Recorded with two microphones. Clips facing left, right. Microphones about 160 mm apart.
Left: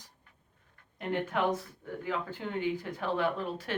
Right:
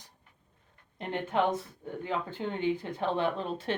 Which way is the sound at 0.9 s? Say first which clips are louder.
Left 1 dB; 25° right (ahead or behind).